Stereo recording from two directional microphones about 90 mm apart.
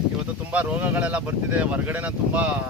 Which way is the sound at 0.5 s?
15° right (ahead or behind).